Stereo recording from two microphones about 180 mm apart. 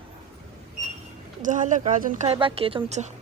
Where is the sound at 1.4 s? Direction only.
45° right (ahead or behind).